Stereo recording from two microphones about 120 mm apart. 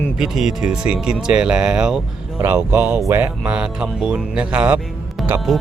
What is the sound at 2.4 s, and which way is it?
Speech, 20° right (ahead or behind).